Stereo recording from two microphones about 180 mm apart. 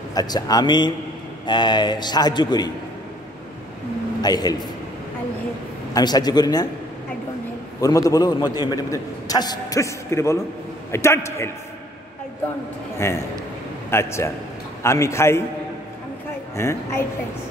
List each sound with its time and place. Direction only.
0.1 s a man's voice: 20° left (ahead or behind)
4.2 s a man's voice: 20° left (ahead or behind)
5.9 s a man's voice: 20° left (ahead or behind)
7.8 s a man's voice: 20° left (ahead or behind)
12.9 s a man's voice: 15° left (ahead or behind)
16.5 s a man's voice: 15° left (ahead or behind)